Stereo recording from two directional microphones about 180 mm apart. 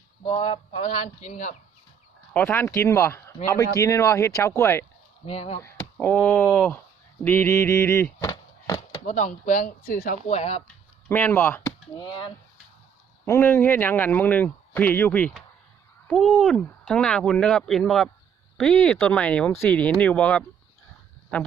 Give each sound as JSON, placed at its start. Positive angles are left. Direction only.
{"t": 0.3, "sound": "speech", "side_deg": 30}
{"t": 2.3, "sound": "a man's voice", "side_deg": 10}
{"t": 5.2, "sound": "speech", "side_deg": 35}
{"t": 5.6, "sound": "speech", "side_deg": 10}
{"t": 7.2, "sound": "a sound", "side_deg": 10}
{"t": 9.0, "sound": "speech", "side_deg": 40}
{"t": 10.2, "sound": "speech", "side_deg": 35}
{"t": 11.1, "sound": "a man's voice", "side_deg": 10}
{"t": 13.2, "sound": "a man's voice", "side_deg": 15}